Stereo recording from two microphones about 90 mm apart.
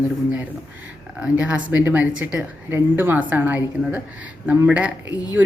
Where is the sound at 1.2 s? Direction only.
15° right (ahead or behind).